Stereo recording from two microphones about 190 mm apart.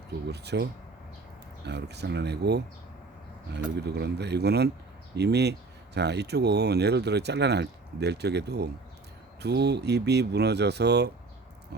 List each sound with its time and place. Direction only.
0.3 s speech: 60° right (ahead or behind)